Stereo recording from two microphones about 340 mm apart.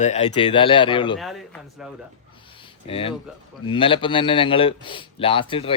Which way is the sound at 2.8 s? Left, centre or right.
Centre.